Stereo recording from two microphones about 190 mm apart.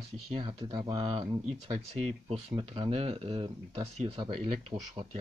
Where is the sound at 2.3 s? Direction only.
30° right (ahead or behind).